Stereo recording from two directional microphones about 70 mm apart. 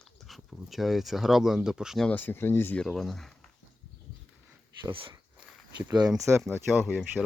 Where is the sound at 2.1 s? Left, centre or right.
Left.